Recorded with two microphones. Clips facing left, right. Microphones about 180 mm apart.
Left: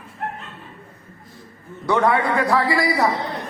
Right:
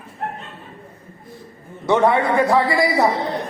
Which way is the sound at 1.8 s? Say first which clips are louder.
Right 2 dB; 25° right (ahead or behind).